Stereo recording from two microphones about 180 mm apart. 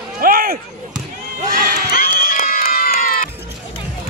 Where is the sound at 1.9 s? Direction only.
55° left (ahead or behind).